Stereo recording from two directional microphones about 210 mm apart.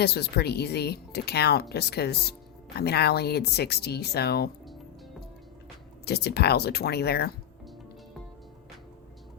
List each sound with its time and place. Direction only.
0.0 s speech: 50° left (ahead or behind)
6.1 s speech: 50° left (ahead or behind)